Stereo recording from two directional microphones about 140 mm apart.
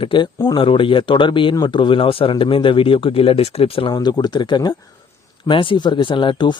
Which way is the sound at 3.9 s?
30° left (ahead or behind).